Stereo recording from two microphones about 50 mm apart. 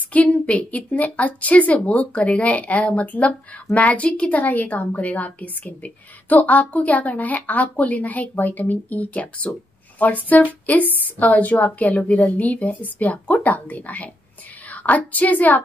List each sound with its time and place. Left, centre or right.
0.1 s a woman's voice: left